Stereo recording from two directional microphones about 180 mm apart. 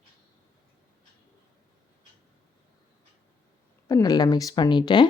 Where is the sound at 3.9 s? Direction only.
20° left (ahead or behind).